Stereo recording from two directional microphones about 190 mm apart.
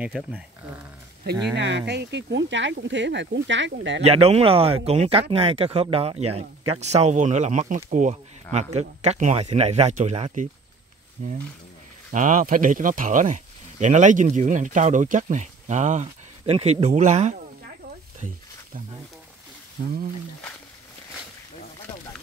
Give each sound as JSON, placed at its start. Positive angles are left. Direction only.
{"t": 0.0, "sound": "speech", "side_deg": -5}
{"t": 1.5, "sound": "speech", "side_deg": -65}
{"t": 4.0, "sound": "speech", "side_deg": -30}